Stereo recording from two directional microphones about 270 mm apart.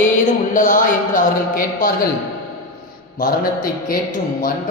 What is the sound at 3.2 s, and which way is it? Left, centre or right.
Speech, left.